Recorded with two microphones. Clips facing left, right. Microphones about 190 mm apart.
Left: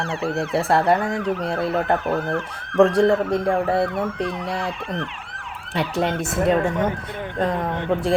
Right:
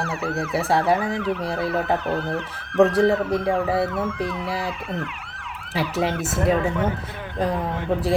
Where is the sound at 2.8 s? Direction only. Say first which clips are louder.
Left 1 dB; 5° right (ahead or behind).